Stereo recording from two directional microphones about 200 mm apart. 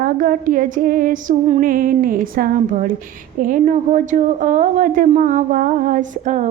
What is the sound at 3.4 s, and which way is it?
A woman's voice, 45° right (ahead or behind).